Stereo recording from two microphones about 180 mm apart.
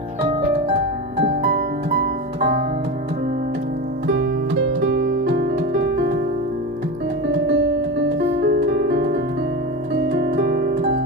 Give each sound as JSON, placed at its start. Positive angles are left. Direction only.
{"t": 1.2, "sound": "music", "side_deg": -70}
{"t": 4.0, "sound": "music", "side_deg": -90}
{"t": 7.3, "sound": "music", "side_deg": -75}